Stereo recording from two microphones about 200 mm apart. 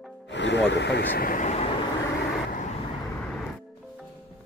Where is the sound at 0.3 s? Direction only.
60° left (ahead or behind); by 1.7 s 35° left (ahead or behind).